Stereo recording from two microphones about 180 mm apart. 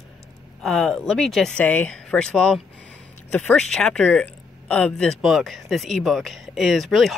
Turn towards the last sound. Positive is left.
turn(degrees=0)  # may be behind; listen again after turning